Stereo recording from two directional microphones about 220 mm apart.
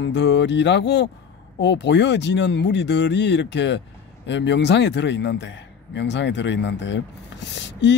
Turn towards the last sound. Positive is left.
turn(degrees=55)  # may be behind; listen again after turning